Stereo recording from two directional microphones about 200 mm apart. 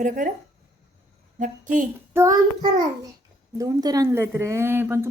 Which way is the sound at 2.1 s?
15° right (ahead or behind).